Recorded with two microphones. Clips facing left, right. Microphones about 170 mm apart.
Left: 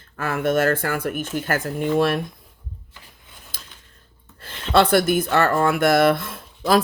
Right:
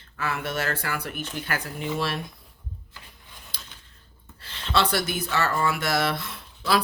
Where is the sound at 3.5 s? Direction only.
50° left (ahead or behind).